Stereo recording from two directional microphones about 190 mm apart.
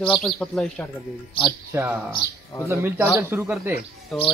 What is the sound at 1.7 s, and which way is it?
Speech, 10° right (ahead or behind).